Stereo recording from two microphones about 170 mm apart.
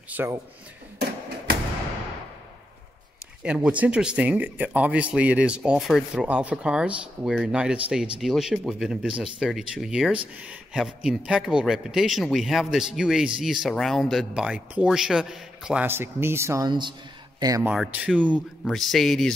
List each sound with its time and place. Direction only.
0.1 s speech: 15° right (ahead or behind)
3.4 s speech: 5° right (ahead or behind); by 17.6 s 20° right (ahead or behind)
17.6 s speech: 5° right (ahead or behind)